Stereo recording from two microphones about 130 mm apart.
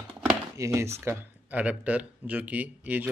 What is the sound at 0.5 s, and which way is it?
Speech, 25° right (ahead or behind).